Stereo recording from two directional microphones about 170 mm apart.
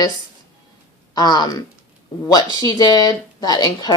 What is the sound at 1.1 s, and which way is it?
Speech, 25° left (ahead or behind).